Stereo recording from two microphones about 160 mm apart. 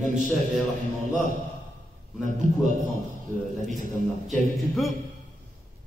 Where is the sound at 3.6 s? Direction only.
55° right (ahead or behind).